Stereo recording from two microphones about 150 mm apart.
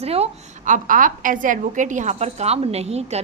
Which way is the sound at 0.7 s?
65° right (ahead or behind).